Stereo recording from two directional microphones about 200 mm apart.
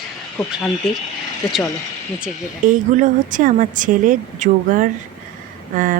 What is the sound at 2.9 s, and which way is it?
A woman's voice, 40° right (ahead or behind).